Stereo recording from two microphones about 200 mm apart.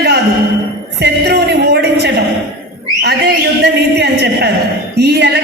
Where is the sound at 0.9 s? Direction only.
55° right (ahead or behind).